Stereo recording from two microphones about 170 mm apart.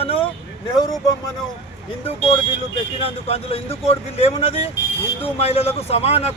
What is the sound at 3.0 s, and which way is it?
A man's voice, 35° left (ahead or behind).